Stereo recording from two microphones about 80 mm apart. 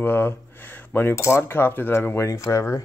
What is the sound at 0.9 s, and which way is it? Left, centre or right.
Cutlery, left.